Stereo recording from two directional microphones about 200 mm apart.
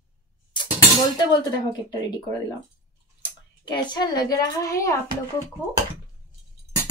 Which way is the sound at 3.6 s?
20° left (ahead or behind).